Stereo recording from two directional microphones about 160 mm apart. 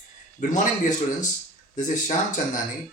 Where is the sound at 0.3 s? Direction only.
50° left (ahead or behind).